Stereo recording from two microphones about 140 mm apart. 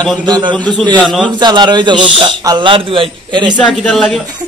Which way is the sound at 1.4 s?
30° right (ahead or behind).